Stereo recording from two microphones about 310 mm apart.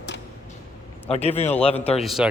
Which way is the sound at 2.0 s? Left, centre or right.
Centre.